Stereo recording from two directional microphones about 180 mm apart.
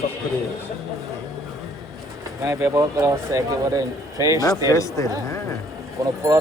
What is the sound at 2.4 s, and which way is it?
Speech, 15° right (ahead or behind).